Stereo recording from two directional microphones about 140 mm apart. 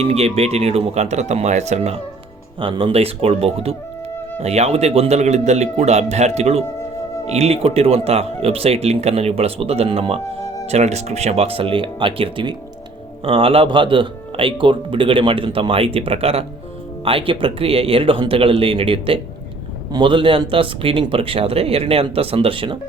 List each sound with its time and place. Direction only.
0.0 s speech: 45° right (ahead or behind)
2.6 s speech: 35° right (ahead or behind)